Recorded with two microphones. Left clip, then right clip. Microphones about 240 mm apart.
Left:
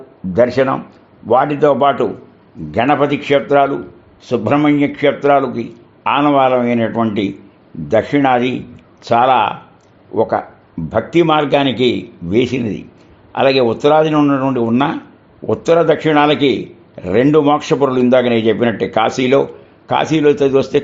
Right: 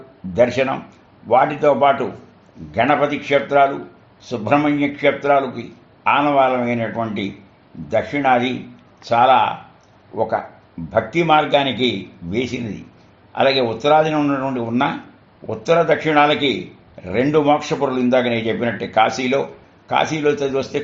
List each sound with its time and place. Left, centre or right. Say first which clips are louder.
0.3 s speech: left 4 dB; left
1.3 s a man's voice: left 3 dB; left